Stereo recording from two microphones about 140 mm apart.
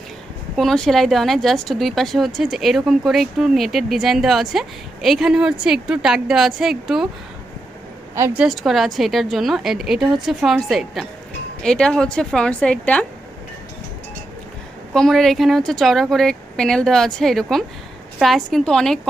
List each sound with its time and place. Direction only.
0.5 s a woman's voice: centre (ahead or behind)
8.1 s speech: 20° right (ahead or behind)
8.4 s a woman's voice: centre (ahead or behind)
14.9 s a woman's voice: 5° left (ahead or behind)